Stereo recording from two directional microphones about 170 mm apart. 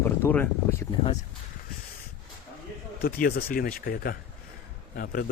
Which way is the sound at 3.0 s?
60° left (ahead or behind).